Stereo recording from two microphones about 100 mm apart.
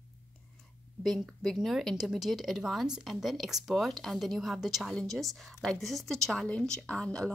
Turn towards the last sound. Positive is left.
turn(degrees=10)  # may be behind; listen again after turning